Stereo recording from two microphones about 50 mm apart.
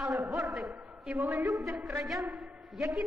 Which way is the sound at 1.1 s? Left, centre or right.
Right.